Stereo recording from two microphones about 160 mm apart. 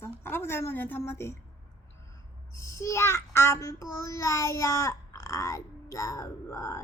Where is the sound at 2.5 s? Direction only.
20° left (ahead or behind).